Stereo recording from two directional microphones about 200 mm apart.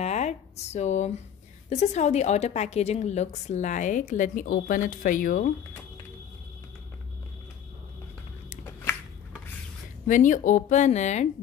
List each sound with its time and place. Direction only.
0.0 s a sound: 35° left (ahead or behind)
1.7 s a woman's voice: 35° left (ahead or behind)
10.0 s a woman's voice: 40° left (ahead or behind)